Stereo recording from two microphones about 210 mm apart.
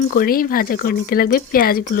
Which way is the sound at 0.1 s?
45° left (ahead or behind).